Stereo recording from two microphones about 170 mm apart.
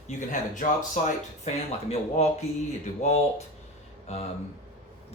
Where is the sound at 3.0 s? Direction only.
40° left (ahead or behind).